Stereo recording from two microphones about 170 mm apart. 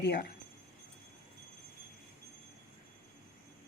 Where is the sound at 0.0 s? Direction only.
80° left.